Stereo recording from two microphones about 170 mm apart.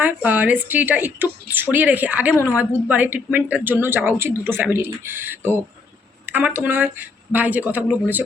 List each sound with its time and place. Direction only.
0.0 s a woman's voice: 10° right (ahead or behind)